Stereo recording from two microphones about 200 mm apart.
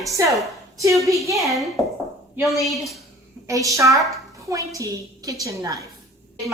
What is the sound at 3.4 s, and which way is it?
A woman's voice, 15° right (ahead or behind).